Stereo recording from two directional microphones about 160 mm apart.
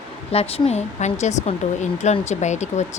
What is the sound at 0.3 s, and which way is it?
Speech, 40° left (ahead or behind).